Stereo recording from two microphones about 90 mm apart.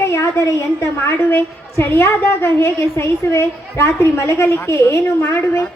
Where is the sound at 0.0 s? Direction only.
30° left (ahead or behind).